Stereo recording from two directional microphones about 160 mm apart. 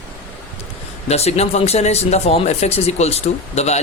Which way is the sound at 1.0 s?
40° left (ahead or behind).